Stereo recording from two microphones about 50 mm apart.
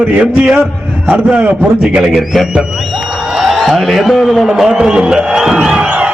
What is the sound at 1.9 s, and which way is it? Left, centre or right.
A man's voice, centre.